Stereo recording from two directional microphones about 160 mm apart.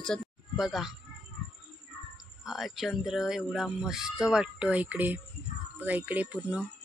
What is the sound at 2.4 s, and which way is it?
Speech, centre (ahead or behind).